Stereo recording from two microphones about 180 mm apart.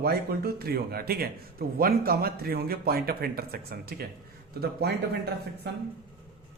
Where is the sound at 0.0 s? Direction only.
60° right (ahead or behind).